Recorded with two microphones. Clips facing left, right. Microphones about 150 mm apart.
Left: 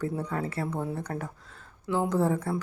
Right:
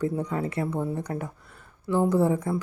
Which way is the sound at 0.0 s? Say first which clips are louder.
Right 3 dB; 15° right (ahead or behind).